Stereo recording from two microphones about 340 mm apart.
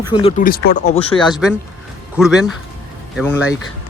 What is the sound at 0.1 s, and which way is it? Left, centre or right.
Speech, centre.